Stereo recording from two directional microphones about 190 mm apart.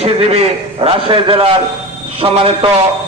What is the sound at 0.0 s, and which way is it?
A man's voice, 35° right (ahead or behind).